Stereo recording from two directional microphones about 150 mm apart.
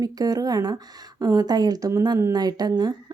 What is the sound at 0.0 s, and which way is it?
A woman's voice, 25° right (ahead or behind).